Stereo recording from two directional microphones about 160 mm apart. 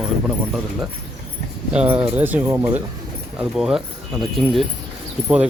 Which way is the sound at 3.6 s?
Centre (ahead or behind).